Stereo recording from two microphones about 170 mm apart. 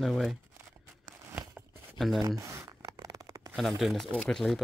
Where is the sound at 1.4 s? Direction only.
15° right (ahead or behind).